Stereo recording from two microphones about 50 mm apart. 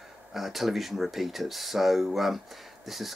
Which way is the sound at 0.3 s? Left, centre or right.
Centre.